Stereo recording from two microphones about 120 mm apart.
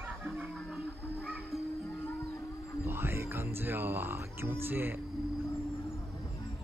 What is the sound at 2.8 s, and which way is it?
A man's voice, 20° right (ahead or behind).